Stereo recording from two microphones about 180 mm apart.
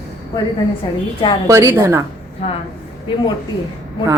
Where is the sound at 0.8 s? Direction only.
25° left (ahead or behind).